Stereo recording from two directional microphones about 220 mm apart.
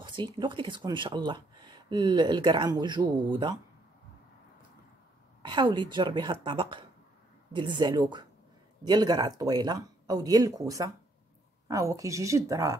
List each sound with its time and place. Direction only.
0.0 s speech: 20° right (ahead or behind)
5.4 s speech: 20° right (ahead or behind)